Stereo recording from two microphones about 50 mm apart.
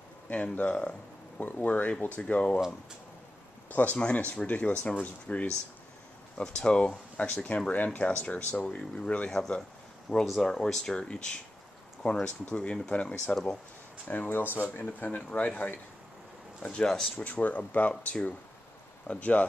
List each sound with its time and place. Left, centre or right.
0.3 s speech: left
3.7 s speech: left
9.6 s a sound: centre
10.2 s speech: centre; by 13.3 s left
14.0 s speech: left
16.8 s speech: centre
17.2 s speech: left